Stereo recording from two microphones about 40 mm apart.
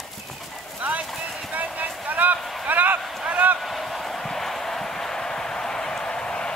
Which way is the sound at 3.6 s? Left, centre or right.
Centre.